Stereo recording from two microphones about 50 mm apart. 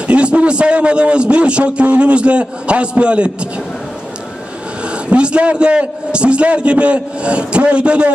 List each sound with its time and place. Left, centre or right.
0.1 s a man's voice: right
4.9 s a man's voice: right